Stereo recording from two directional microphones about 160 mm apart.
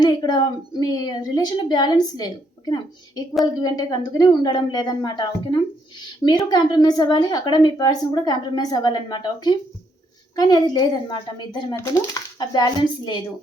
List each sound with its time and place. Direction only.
0.0 s a woman's voice: 25° left (ahead or behind)